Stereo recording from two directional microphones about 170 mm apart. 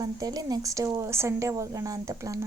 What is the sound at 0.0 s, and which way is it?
A woman's voice, 20° right (ahead or behind).